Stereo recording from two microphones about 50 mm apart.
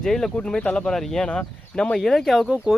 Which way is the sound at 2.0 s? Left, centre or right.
Centre.